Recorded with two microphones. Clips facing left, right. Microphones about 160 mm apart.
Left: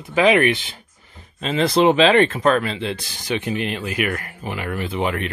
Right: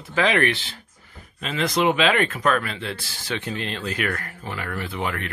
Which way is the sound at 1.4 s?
30° left (ahead or behind).